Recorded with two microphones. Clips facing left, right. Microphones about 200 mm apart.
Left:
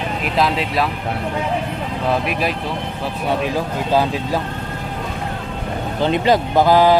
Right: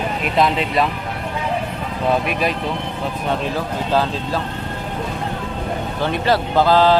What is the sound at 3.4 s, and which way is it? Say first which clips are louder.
Speech: left 2 dB; 15° left (ahead or behind).